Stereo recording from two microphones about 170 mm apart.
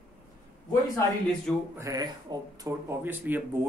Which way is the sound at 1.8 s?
20° right (ahead or behind).